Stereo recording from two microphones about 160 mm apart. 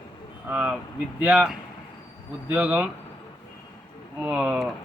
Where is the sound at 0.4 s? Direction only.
5° right (ahead or behind).